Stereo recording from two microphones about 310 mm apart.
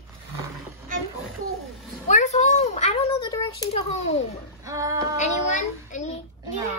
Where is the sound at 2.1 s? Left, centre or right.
Left.